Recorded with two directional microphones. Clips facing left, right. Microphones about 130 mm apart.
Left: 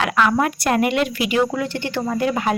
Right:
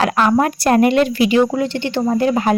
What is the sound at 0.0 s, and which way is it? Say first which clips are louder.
Speech: right 3 dB; 35° right (ahead or behind).